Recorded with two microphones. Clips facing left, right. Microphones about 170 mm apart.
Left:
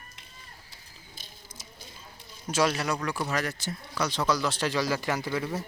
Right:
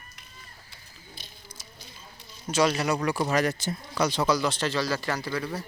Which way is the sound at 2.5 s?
5° left (ahead or behind).